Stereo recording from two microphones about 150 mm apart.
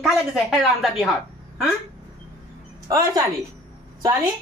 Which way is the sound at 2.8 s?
25° right (ahead or behind).